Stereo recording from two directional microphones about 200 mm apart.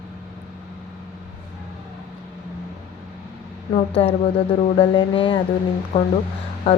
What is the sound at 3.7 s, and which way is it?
A woman's voice, 30° left (ahead or behind).